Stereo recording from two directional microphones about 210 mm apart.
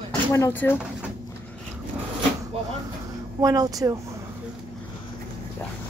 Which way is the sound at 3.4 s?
15° right (ahead or behind).